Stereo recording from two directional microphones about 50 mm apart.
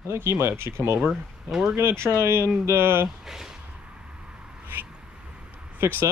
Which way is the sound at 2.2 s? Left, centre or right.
Right.